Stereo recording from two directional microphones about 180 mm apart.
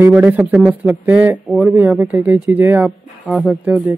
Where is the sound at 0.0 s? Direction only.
10° right (ahead or behind).